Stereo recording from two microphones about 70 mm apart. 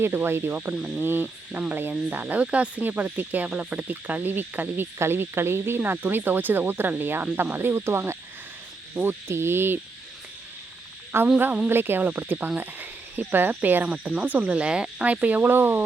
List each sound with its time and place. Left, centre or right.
0.0 s speech: right
11.1 s speech: right